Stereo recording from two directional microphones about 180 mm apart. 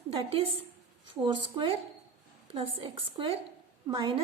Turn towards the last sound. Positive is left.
turn(degrees=-25)  # may be behind; listen again after turning